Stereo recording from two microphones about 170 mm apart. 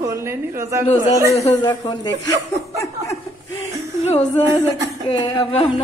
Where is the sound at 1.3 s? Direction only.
25° left (ahead or behind).